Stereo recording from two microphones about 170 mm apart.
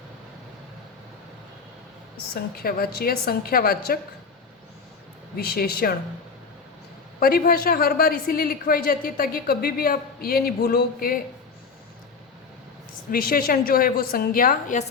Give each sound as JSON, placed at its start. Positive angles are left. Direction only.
{"t": 2.3, "sound": "a woman's voice", "side_deg": 60}
{"t": 5.4, "sound": "a woman's voice", "side_deg": 65}
{"t": 7.2, "sound": "a woman's voice", "side_deg": 60}
{"t": 13.1, "sound": "a woman's voice", "side_deg": 60}